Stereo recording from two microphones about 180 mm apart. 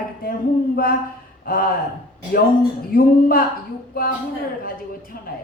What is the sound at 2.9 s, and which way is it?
Speech, 55° left (ahead or behind).